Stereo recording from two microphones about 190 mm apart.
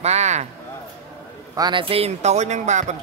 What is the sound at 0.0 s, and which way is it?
Speech, 35° right (ahead or behind).